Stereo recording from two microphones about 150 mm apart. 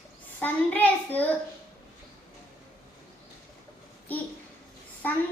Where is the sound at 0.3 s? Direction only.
10° left (ahead or behind).